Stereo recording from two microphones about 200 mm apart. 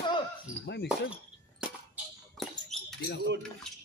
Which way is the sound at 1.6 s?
5° right (ahead or behind).